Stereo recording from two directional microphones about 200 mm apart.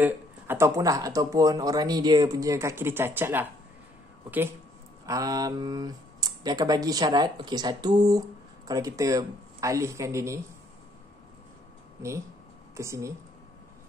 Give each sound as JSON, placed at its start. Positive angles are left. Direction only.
{"t": 0.0, "sound": "speech", "side_deg": -10}
{"t": 12.7, "sound": "speech", "side_deg": -15}